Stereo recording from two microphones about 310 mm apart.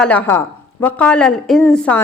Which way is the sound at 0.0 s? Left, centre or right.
Centre.